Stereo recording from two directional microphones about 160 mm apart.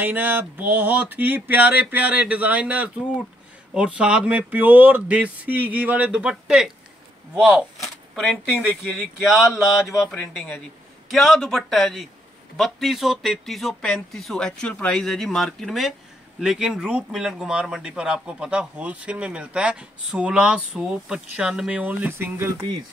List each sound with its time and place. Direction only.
0.0 s speech: 10° right (ahead or behind)